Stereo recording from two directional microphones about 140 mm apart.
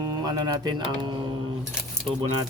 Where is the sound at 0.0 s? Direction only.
30° right (ahead or behind).